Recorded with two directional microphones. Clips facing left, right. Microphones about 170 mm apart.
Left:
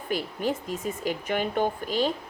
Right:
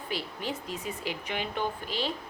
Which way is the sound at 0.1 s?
50° left (ahead or behind).